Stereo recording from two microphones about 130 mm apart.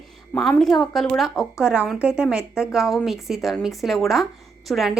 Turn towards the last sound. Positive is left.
turn(degrees=0)  # may be behind; listen again after turning